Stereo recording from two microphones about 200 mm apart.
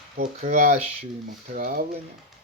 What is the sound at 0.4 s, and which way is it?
Speech, 40° right (ahead or behind).